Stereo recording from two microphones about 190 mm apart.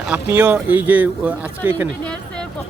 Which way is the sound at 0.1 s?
10° right (ahead or behind).